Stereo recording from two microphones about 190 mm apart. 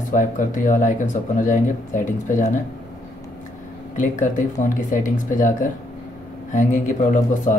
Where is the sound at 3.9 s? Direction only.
40° left (ahead or behind).